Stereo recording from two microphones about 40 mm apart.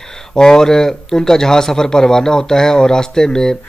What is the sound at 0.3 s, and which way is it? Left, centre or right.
Speech, centre.